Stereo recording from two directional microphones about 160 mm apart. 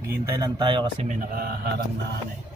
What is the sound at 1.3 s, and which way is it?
Speech, 70° right (ahead or behind).